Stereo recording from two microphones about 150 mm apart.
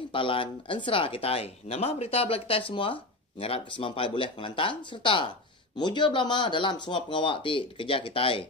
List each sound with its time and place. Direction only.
0.1 s speech: 35° left (ahead or behind)